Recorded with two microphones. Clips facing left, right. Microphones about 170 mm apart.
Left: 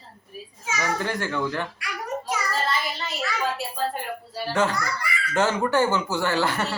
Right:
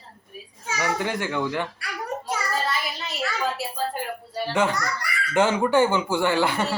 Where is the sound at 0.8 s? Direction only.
15° right (ahead or behind).